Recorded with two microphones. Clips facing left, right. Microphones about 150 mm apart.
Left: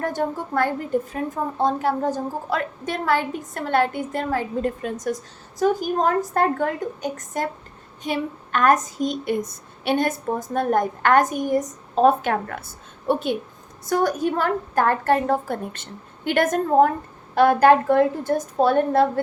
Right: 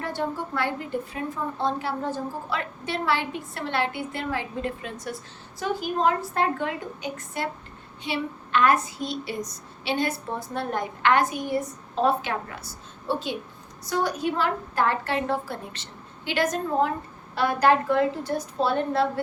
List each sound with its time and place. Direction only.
0.0 s a woman's voice: 45° left (ahead or behind)